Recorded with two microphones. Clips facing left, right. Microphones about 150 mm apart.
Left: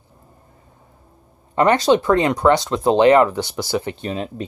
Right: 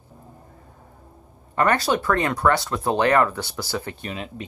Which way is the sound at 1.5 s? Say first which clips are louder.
Left 6 dB; 20° left (ahead or behind).